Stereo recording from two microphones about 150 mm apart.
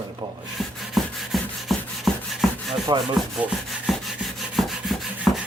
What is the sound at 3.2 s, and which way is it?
Rub, centre (ahead or behind).